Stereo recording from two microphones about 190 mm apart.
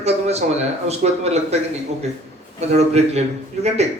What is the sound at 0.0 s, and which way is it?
A man's voice, 35° right (ahead or behind).